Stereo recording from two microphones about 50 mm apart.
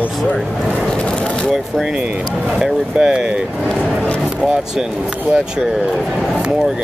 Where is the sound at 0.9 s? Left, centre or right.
Centre.